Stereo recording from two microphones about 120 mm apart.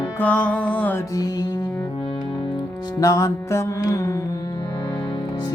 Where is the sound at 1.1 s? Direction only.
35° left (ahead or behind).